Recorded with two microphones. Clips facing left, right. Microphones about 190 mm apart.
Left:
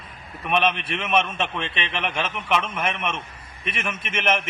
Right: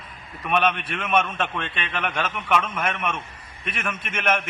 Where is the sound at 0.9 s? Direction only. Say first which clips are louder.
Even; 25° left (ahead or behind).